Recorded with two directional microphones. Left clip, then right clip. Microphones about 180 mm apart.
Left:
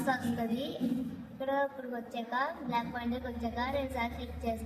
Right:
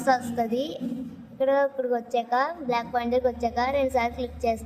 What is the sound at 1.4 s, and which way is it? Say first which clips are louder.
A woman's voice: right 10 dB; 65° right (ahead or behind).